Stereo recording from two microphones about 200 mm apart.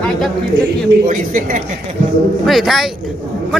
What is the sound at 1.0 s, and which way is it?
Speech, 40° right (ahead or behind).